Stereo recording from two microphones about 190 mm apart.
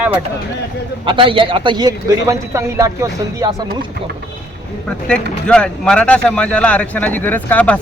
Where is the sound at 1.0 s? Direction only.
25° right (ahead or behind).